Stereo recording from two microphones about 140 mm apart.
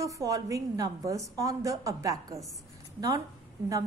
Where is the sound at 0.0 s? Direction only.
25° right (ahead or behind).